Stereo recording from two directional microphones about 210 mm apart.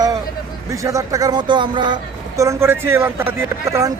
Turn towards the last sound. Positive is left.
turn(degrees=-15)  # may be behind; listen again after turning